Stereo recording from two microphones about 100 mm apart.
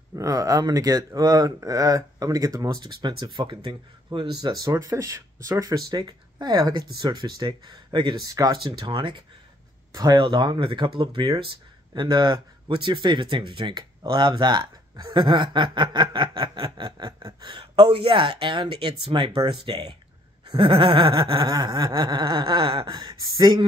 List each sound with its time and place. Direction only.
0.1 s speech: 35° right (ahead or behind); by 8.2 s 50° right (ahead or behind)
8.2 s speech: 40° right (ahead or behind)
8.5 s speech: 50° right (ahead or behind)